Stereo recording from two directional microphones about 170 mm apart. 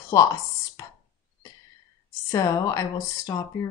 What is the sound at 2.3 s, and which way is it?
A woman's voice, 20° left (ahead or behind).